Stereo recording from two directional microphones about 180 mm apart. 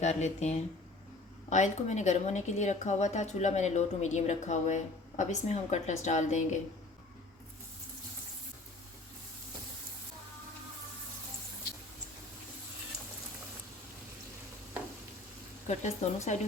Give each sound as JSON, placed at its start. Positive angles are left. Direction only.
{"t": 0.0, "sound": "a woman's voice", "side_deg": 40}
{"t": 15.6, "sound": "a woman's voice", "side_deg": 40}